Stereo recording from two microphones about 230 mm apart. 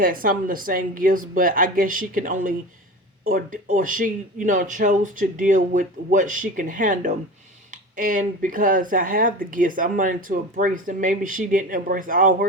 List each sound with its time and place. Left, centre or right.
0.0 s speech: right